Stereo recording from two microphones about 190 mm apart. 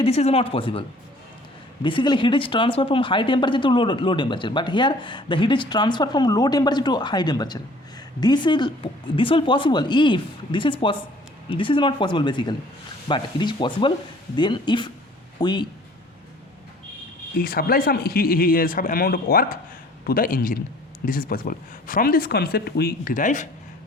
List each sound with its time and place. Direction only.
0.0 s speech: 35° left (ahead or behind)
17.3 s speech: 50° left (ahead or behind)